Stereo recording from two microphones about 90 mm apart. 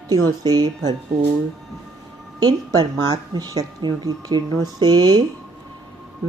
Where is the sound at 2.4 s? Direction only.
50° right (ahead or behind).